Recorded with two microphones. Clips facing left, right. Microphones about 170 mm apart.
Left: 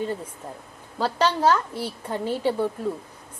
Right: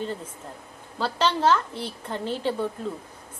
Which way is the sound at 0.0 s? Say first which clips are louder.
Left 3 dB; 10° left (ahead or behind).